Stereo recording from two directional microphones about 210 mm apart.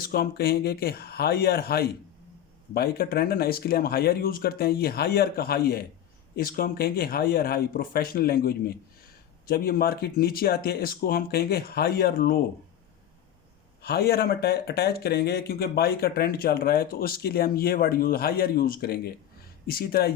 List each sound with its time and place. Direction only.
0.0 s speech: 45° left (ahead or behind)
13.8 s speech: 50° left (ahead or behind)